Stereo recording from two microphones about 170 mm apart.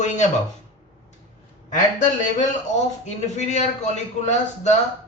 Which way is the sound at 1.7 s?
45° left (ahead or behind).